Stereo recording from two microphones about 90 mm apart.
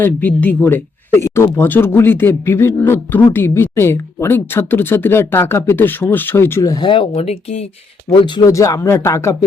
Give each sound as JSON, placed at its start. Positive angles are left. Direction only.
{"t": 0.0, "sound": "speech", "side_deg": 20}
{"t": 6.7, "sound": "speech", "side_deg": 65}
{"t": 8.4, "sound": "speech", "side_deg": 35}